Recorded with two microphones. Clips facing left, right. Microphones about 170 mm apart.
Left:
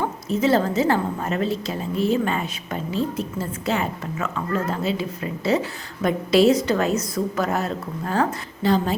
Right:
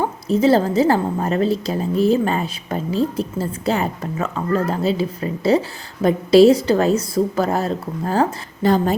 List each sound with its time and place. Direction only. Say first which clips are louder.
0.0 s a woman's voice: right 5 dB; 35° right (ahead or behind)
8.6 s a woman's voice: right 4 dB; 45° right (ahead or behind)